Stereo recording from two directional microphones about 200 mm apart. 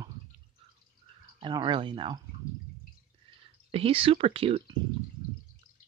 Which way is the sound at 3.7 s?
30° right (ahead or behind).